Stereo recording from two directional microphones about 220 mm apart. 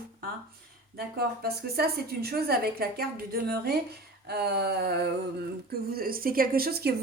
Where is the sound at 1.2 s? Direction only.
45° right (ahead or behind).